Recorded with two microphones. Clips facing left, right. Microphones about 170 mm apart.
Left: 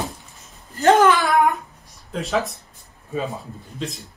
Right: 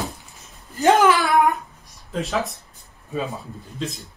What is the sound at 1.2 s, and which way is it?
Speech, centre (ahead or behind).